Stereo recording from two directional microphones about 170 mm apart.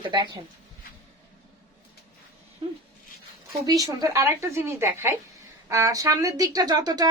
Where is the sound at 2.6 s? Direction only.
30° right (ahead or behind).